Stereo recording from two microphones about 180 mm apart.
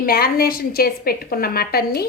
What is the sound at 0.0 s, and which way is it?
A woman's voice, 55° left (ahead or behind).